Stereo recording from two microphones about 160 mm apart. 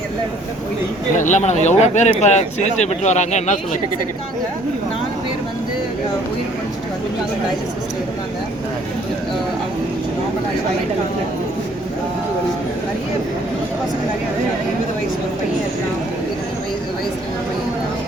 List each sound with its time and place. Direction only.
1.1 s speech: 50° left (ahead or behind)